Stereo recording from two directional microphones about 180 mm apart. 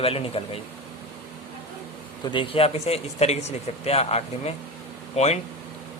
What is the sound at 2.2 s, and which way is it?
A man's voice, 30° left (ahead or behind).